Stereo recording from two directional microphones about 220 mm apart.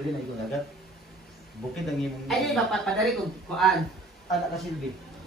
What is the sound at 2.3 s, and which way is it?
Speech, centre (ahead or behind).